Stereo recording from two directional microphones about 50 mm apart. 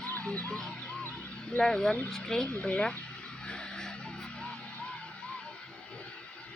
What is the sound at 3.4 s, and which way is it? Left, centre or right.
Music, centre.